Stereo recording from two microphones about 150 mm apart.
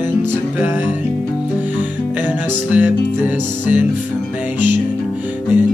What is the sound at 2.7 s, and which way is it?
Music, 10° right (ahead or behind).